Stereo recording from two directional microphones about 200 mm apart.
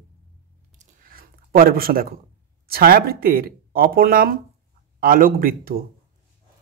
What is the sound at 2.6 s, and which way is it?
Speech, 50° right (ahead or behind).